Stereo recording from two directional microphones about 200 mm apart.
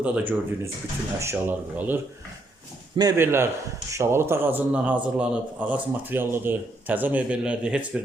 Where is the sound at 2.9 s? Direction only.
20° right (ahead or behind).